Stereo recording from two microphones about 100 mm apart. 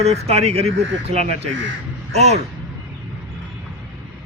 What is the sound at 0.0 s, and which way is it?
Speech, 90° right.